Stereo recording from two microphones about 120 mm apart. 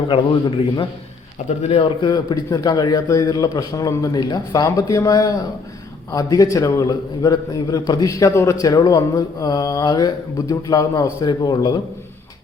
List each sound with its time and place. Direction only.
0.1 s a man's voice: 45° left (ahead or behind)
1.5 s a man's voice: 60° left (ahead or behind)
2.0 s a man's voice: 35° left (ahead or behind)